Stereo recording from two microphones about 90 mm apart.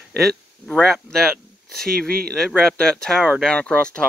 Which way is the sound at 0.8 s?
5° left (ahead or behind).